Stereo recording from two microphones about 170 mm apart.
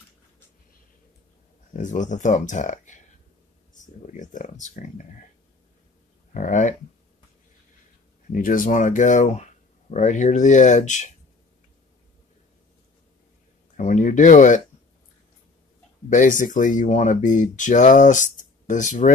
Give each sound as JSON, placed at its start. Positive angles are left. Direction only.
{"t": 1.8, "sound": "speech", "side_deg": 50}
{"t": 6.3, "sound": "speech", "side_deg": 45}
{"t": 8.3, "sound": "speech", "side_deg": 50}
{"t": 13.7, "sound": "speech", "side_deg": 45}
{"t": 16.1, "sound": "speech", "side_deg": 50}